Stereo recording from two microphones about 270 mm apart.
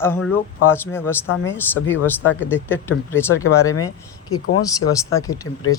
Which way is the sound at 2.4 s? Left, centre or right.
Centre.